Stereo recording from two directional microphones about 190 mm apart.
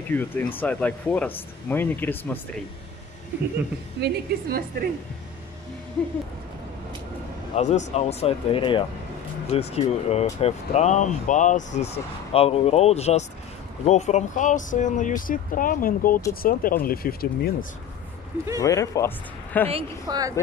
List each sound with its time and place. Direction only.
0.1 s speech: 10° left (ahead or behind)
4.0 s a woman's voice: 50° right (ahead or behind)
7.5 s speech: 40° left (ahead or behind)
18.6 s speech: 15° left (ahead or behind)
19.7 s a woman's voice: 20° right (ahead or behind)